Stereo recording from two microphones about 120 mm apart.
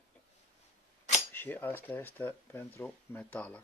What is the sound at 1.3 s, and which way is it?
Speech, 15° left (ahead or behind).